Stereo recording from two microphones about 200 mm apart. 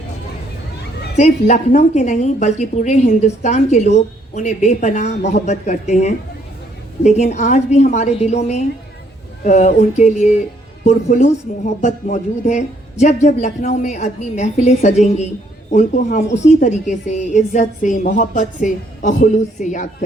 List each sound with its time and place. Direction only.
1.1 s a woman's voice: 35° left (ahead or behind)